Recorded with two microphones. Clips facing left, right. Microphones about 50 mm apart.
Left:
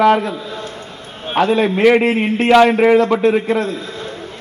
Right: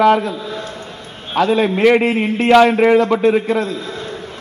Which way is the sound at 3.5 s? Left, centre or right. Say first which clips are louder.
Even; left.